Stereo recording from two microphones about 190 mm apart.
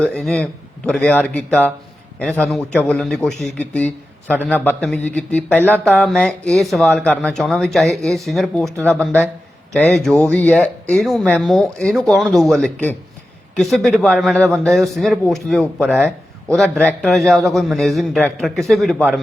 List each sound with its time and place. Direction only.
0.0 s a man's voice: 5° left (ahead or behind)